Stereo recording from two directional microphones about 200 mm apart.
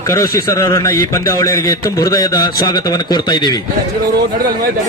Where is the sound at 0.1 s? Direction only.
15° left (ahead or behind).